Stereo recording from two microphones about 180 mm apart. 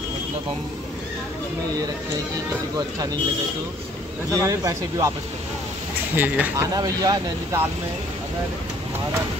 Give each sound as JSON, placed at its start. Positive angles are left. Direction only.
{"t": 4.3, "sound": "speech", "side_deg": -15}
{"t": 6.1, "sound": "speech", "side_deg": -10}
{"t": 6.7, "sound": "speech", "side_deg": -20}